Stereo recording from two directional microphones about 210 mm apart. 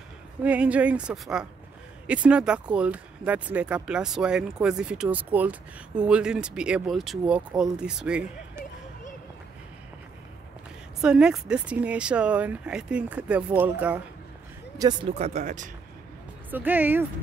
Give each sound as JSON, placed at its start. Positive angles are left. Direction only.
{"t": 0.4, "sound": "speech", "side_deg": -5}
{"t": 11.0, "sound": "speech", "side_deg": -5}
{"t": 14.8, "sound": "speech", "side_deg": -20}
{"t": 16.4, "sound": "speech", "side_deg": -10}